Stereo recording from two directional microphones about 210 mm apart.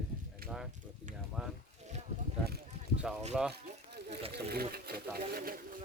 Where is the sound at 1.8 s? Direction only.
30° right (ahead or behind).